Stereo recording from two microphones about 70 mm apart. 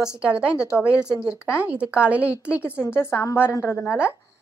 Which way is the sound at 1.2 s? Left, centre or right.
Centre.